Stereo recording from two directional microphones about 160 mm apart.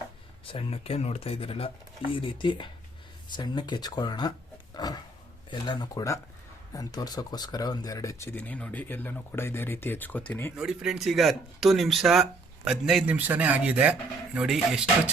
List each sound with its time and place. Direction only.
0.4 s speech: 35° left (ahead or behind)
5.5 s speech: 30° left (ahead or behind); by 10.5 s 10° left (ahead or behind)
10.5 s speech: 5° right (ahead or behind)